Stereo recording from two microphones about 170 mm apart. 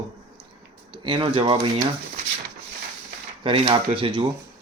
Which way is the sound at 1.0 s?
30° right (ahead or behind).